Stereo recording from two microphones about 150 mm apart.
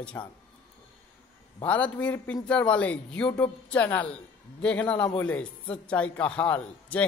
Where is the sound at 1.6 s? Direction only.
10° left (ahead or behind).